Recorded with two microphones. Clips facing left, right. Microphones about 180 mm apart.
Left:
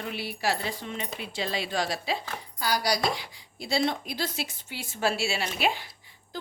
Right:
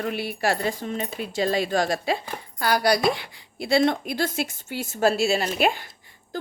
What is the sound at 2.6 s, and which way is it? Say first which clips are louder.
A woman's voice: right 6 dB; 60° right (ahead or behind).